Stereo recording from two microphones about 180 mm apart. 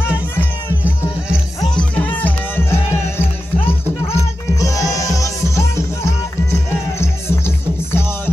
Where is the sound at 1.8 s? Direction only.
10° left (ahead or behind).